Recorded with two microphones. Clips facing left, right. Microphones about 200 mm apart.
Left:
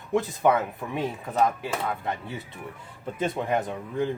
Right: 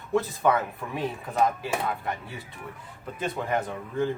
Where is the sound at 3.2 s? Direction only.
20° left (ahead or behind).